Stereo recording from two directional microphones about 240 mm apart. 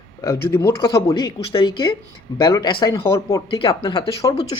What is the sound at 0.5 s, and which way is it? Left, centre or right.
Speech, centre.